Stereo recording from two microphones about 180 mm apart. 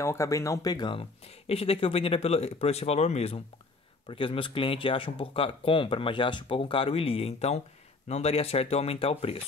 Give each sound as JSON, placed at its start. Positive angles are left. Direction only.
{"t": 0.0, "sound": "speech", "side_deg": 15}